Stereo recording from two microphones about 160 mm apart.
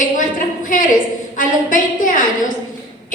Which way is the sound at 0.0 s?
55° left (ahead or behind).